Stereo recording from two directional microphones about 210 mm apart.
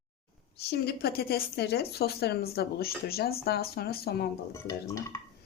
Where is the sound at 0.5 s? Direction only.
50° left (ahead or behind).